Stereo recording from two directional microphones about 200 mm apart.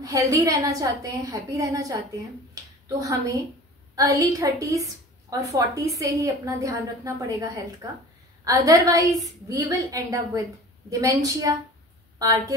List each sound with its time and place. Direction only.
0.0 s a woman's voice: 15° right (ahead or behind)
2.5 s a sound: 15° right (ahead or behind)
3.9 s a woman's voice: 15° right (ahead or behind)